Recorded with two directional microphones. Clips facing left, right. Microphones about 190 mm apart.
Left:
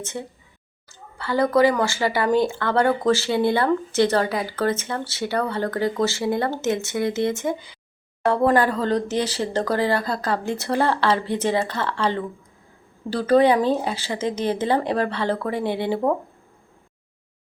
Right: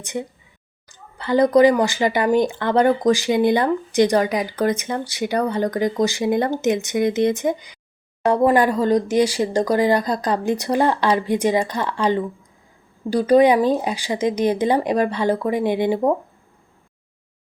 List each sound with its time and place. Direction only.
0.0 s speech: 15° right (ahead or behind)